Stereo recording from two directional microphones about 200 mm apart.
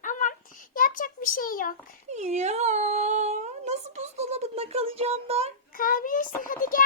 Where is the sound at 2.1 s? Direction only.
35° right (ahead or behind).